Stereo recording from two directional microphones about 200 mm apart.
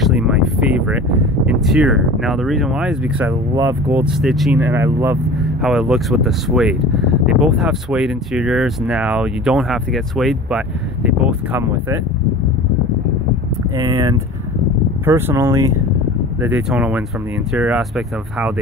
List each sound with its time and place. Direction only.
0.0 s speech: 5° right (ahead or behind)
13.7 s speech: 15° right (ahead or behind)